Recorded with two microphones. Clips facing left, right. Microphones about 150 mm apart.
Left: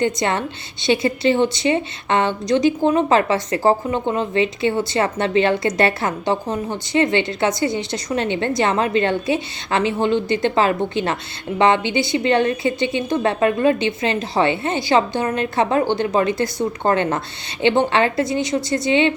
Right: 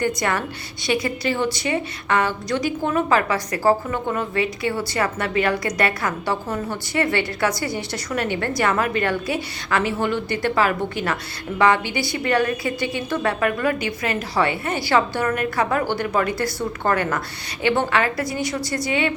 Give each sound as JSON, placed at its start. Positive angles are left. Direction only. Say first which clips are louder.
{"t": 0.0, "sound": "a woman's voice", "louder": "left 3 dB", "side_deg": 25}